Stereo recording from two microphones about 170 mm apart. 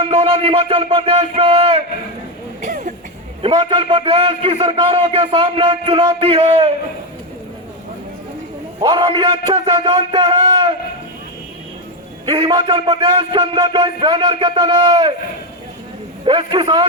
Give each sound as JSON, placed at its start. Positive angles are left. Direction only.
{"t": 0.0, "sound": "music", "side_deg": -35}
{"t": 2.6, "sound": "a sound", "side_deg": -45}
{"t": 3.4, "sound": "a man's voice", "side_deg": -30}
{"t": 8.8, "sound": "a man's voice", "side_deg": -25}
{"t": 12.2, "sound": "a man's voice", "side_deg": -30}
{"t": 16.2, "sound": "a man's voice", "side_deg": -30}